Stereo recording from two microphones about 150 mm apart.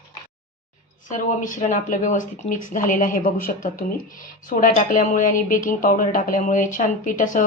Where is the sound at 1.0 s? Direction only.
60° left (ahead or behind).